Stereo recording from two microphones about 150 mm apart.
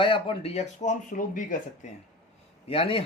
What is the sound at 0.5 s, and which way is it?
Speech, 50° left (ahead or behind).